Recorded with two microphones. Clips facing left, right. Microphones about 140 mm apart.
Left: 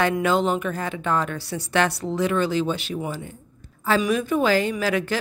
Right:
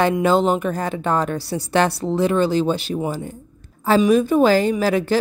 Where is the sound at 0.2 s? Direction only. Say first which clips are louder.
Right 4 dB; 35° right (ahead or behind).